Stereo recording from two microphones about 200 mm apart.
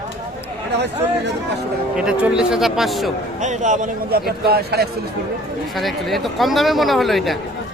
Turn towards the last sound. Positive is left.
turn(degrees=0)  # may be behind; listen again after turning